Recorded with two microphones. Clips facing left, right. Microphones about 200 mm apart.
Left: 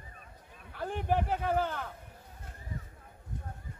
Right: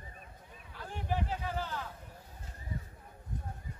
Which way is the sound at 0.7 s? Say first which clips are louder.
Left 6 dB; 55° left (ahead or behind).